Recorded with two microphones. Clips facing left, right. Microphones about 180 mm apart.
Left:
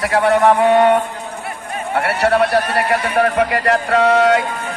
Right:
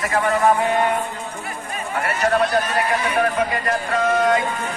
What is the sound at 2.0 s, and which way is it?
A man's voice, 70° left (ahead or behind).